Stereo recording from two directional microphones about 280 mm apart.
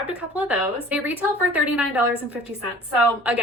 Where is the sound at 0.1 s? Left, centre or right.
Centre.